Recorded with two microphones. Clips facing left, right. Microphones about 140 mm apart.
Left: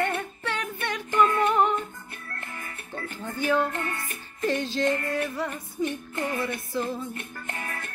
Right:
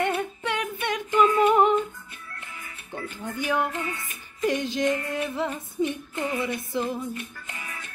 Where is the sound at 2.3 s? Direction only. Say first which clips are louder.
Left 4 dB; 50° left (ahead or behind).